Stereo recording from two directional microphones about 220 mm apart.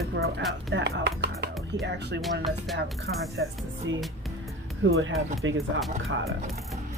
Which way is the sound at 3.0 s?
60° right (ahead or behind).